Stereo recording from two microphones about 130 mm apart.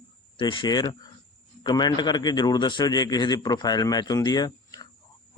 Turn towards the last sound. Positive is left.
turn(degrees=30)  # may be behind; listen again after turning